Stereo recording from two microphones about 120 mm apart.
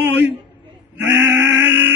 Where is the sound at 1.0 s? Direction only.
15° right (ahead or behind).